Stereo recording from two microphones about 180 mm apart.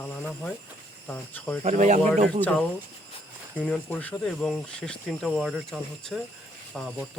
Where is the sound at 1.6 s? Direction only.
45° right (ahead or behind).